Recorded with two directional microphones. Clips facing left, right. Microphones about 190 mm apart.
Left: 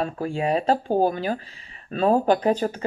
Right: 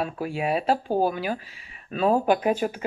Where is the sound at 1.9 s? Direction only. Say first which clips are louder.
Left 2 dB; 40° left (ahead or behind).